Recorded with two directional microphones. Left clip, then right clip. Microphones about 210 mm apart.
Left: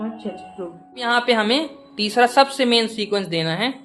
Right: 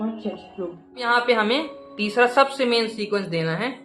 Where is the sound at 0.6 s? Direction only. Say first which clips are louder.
Right 2 dB; 25° right (ahead or behind).